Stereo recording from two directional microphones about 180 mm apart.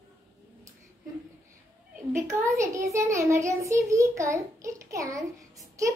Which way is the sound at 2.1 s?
15° right (ahead or behind).